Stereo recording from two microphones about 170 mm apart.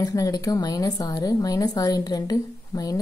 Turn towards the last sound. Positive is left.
turn(degrees=20)  # may be behind; listen again after turning